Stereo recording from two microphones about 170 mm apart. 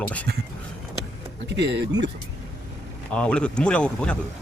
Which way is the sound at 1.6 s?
90° right.